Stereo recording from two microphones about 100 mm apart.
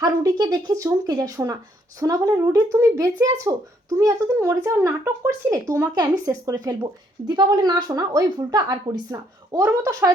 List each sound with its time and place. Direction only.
0.0 s speech: 40° right (ahead or behind)